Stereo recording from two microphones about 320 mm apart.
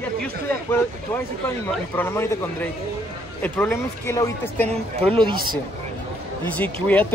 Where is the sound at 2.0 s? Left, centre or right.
Centre.